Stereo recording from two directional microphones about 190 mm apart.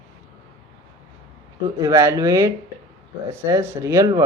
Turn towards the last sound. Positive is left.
turn(degrees=-15)  # may be behind; listen again after turning